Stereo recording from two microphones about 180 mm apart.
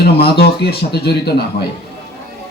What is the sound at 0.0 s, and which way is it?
Speech, 60° left (ahead or behind).